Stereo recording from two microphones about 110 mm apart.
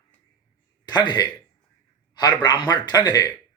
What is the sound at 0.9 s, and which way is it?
Speech, 40° left (ahead or behind).